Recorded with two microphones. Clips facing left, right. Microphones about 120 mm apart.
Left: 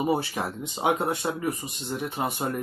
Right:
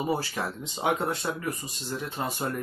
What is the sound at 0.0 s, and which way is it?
Speech, 15° left (ahead or behind).